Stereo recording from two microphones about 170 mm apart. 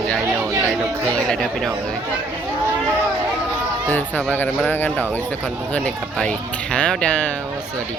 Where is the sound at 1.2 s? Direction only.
Centre (ahead or behind).